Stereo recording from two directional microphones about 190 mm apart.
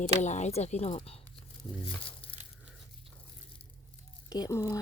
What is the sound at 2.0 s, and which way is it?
Crumpling, 30° left (ahead or behind).